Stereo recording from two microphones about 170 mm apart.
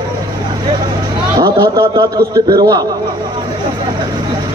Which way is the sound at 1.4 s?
20° right (ahead or behind).